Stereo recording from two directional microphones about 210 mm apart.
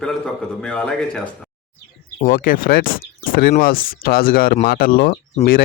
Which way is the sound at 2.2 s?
40° left (ahead or behind).